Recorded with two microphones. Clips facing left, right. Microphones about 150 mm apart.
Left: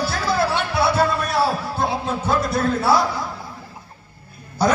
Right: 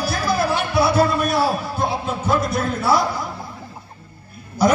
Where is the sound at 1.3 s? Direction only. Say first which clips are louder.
Right 1 dB; 30° left (ahead or behind).